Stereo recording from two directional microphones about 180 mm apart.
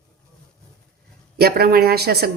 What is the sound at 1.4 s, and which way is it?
Speech, 60° right (ahead or behind).